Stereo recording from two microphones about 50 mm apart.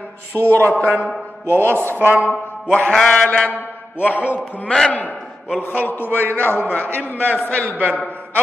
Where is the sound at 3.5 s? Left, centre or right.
Left.